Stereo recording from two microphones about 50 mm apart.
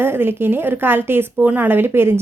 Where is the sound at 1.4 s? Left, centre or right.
Right.